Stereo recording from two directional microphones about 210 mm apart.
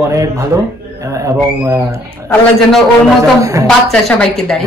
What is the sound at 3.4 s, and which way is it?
Speech, 15° right (ahead or behind).